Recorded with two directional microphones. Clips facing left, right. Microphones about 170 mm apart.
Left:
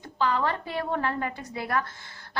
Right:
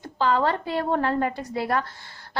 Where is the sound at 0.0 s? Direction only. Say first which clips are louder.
Right 4 dB; 35° right (ahead or behind).